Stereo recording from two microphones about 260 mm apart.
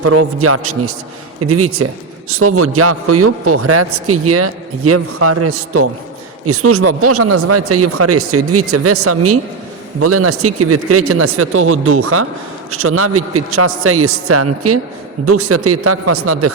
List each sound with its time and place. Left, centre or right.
0.0 s a man's voice: right